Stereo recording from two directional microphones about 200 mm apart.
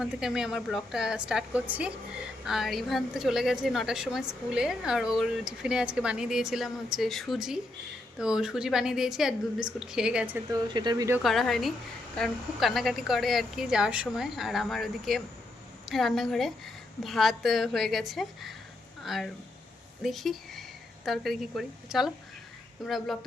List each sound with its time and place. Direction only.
0.0 s a woman's voice: 5° right (ahead or behind)
10.5 s speech: 20° right (ahead or behind)
11.2 s a woman's voice: centre (ahead or behind)